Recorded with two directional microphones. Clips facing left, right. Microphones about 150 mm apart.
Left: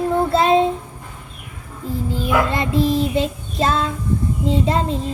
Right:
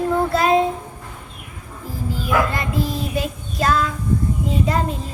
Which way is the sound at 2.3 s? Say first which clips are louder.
Left 2 dB; 25° left (ahead or behind).